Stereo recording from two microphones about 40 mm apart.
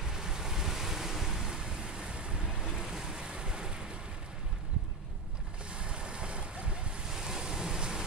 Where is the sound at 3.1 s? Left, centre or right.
Right.